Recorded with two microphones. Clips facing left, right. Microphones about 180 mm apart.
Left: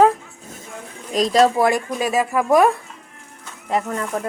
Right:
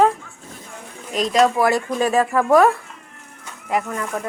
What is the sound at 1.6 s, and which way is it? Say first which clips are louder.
Speech: right 1 dB; 10° left (ahead or behind).